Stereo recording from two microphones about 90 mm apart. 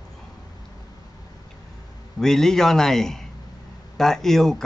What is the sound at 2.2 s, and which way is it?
Speech, 5° left (ahead or behind).